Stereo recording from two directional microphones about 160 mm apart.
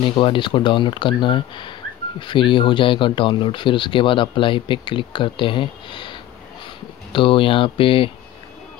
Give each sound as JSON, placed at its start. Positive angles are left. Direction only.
{"t": 0.0, "sound": "speech", "side_deg": 30}